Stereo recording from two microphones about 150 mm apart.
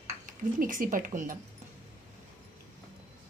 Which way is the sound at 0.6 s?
65° right (ahead or behind).